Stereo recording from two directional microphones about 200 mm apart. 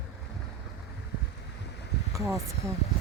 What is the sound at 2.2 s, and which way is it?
Speech, 15° right (ahead or behind).